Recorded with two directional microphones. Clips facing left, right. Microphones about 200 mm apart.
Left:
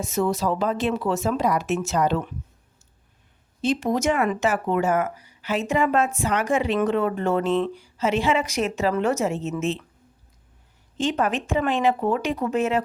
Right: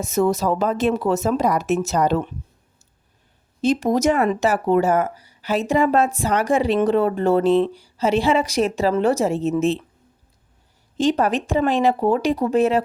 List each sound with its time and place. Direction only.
0.0 s speech: 45° right (ahead or behind)
3.6 s speech: 40° right (ahead or behind)
10.9 s speech: 40° right (ahead or behind)